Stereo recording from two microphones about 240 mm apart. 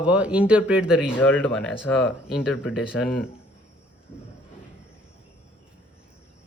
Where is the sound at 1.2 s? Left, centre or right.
Centre.